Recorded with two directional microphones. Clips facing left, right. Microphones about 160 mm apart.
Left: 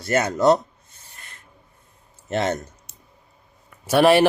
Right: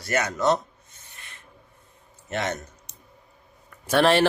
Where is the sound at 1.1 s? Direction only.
40° left (ahead or behind).